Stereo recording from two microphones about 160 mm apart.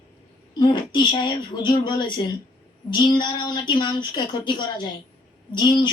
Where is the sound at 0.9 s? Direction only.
25° left (ahead or behind).